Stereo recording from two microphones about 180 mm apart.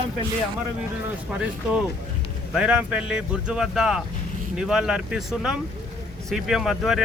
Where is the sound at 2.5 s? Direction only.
5° right (ahead or behind).